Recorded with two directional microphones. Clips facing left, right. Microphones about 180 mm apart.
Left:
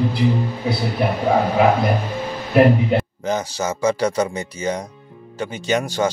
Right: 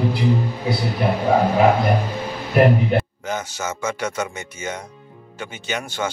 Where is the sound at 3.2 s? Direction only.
35° left (ahead or behind).